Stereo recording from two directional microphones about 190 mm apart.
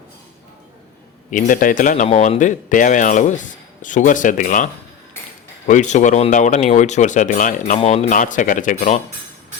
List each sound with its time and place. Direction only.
1.3 s speech: 45° left (ahead or behind)